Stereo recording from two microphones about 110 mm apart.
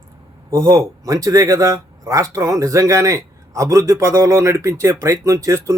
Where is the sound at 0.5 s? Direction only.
30° right (ahead or behind).